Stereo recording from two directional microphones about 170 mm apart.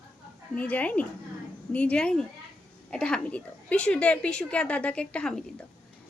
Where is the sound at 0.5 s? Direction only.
10° left (ahead or behind).